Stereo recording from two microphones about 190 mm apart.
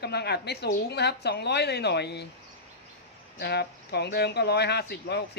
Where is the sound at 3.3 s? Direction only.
60° left (ahead or behind).